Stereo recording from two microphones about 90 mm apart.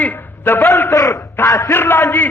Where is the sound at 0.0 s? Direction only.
20° left (ahead or behind).